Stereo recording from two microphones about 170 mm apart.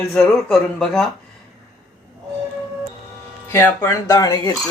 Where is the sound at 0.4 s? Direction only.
Centre (ahead or behind).